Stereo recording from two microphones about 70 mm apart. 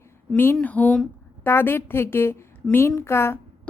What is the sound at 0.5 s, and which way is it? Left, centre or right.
Speech, left.